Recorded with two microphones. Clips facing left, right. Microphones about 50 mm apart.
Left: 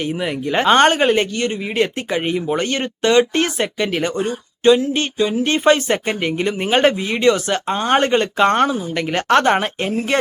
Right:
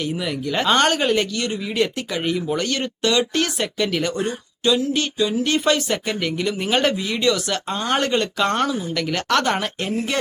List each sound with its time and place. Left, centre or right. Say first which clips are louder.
0.0 s speech: left 3 dB; left